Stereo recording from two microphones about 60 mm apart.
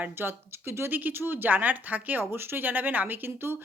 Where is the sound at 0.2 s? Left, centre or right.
Right.